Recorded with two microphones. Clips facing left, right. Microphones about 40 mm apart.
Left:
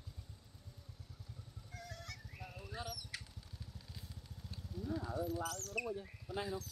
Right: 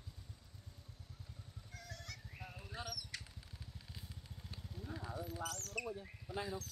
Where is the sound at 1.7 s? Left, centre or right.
Centre.